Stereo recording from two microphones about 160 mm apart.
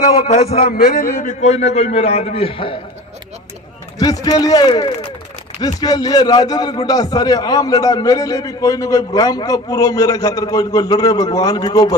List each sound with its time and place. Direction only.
0.3 s a man's voice: 45° left (ahead or behind)
0.6 s a man's voice: 70° left (ahead or behind); by 2.7 s 35° left (ahead or behind)
4.0 s a man's voice: 25° left (ahead or behind)